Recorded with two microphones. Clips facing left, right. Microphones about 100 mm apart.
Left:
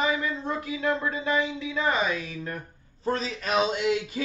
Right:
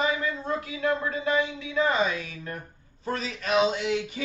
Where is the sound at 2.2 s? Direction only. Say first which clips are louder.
Left 2 dB; 30° left (ahead or behind).